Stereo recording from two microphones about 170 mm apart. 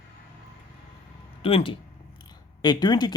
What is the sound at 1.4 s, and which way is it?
Speech, 35° left (ahead or behind).